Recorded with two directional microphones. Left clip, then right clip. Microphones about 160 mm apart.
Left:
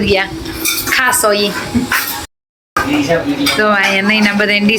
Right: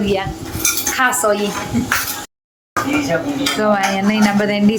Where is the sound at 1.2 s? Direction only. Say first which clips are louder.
Left 4 dB; centre (ahead or behind).